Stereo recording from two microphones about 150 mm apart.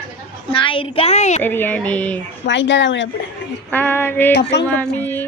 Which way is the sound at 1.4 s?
10° left (ahead or behind).